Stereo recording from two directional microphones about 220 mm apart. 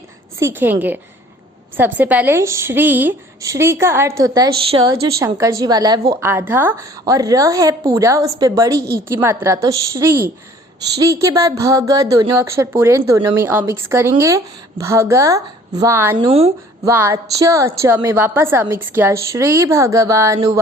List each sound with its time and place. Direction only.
0.3 s a woman's voice: 10° right (ahead or behind)
16.2 s a woman's voice: 25° right (ahead or behind)
16.8 s a woman's voice: 10° right (ahead or behind)